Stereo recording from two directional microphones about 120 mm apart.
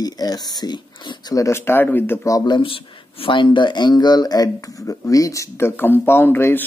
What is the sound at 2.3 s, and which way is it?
Speech, 40° left (ahead or behind).